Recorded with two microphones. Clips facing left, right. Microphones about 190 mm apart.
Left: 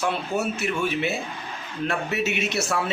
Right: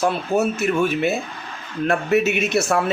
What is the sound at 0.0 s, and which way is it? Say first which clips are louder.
A man's voice: right 6 dB; 45° right (ahead or behind).